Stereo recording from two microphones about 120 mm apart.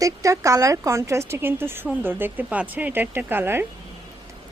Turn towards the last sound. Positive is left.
turn(degrees=-20)  # may be behind; listen again after turning